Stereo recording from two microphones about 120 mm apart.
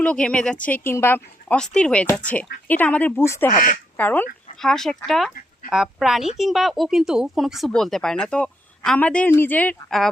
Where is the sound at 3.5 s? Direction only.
90° left.